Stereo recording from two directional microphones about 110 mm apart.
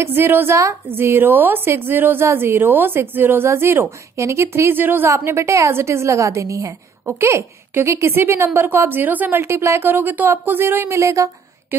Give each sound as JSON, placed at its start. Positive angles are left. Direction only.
{"t": 0.0, "sound": "a woman's voice", "side_deg": -20}